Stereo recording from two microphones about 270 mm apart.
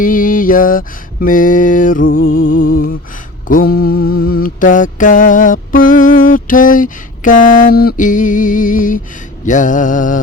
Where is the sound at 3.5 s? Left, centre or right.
Left.